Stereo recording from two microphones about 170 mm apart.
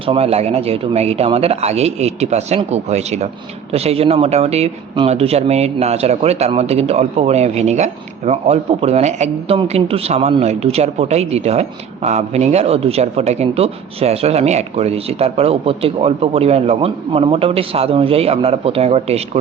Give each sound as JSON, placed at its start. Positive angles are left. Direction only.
{"t": 0.0, "sound": "speech", "side_deg": -35}